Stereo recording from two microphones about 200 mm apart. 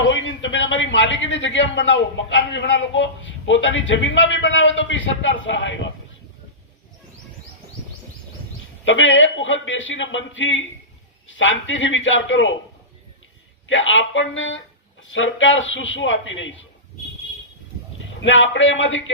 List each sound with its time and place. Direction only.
0.1 s a man's voice: 70° left (ahead or behind)
8.8 s a man's voice: 70° left (ahead or behind)
13.7 s a man's voice: 70° left (ahead or behind)
18.2 s a man's voice: 70° left (ahead or behind)